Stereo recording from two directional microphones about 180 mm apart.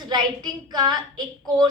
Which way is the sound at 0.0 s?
25° right (ahead or behind).